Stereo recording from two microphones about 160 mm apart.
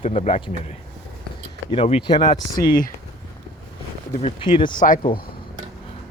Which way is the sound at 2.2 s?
25° left (ahead or behind).